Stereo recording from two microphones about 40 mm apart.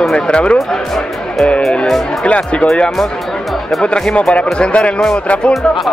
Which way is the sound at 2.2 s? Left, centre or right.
Left.